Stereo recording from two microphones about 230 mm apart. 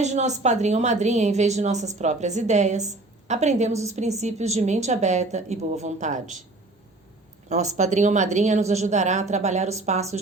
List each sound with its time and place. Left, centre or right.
0.0 s a woman's voice: right
7.5 s a woman's voice: right